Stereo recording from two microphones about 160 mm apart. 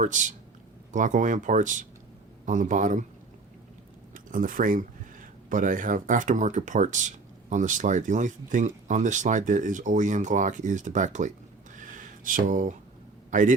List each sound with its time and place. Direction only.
0.0 s speech: 50° right (ahead or behind)
4.1 s speech: 60° right (ahead or behind)
11.8 s a sound: 55° right (ahead or behind)
13.3 s speech: 50° right (ahead or behind)